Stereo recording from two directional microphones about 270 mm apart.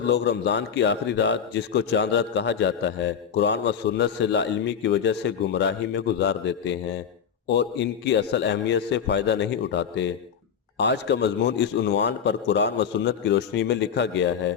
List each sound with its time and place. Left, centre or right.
0.0 s a man's voice: left